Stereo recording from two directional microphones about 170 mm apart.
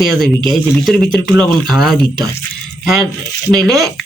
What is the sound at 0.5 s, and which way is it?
A woman's voice, centre (ahead or behind).